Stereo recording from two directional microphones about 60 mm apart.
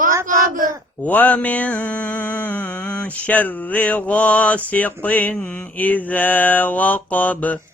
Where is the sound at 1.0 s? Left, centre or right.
Left.